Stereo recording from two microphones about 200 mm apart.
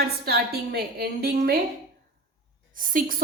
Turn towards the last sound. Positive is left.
turn(degrees=-45)  # may be behind; listen again after turning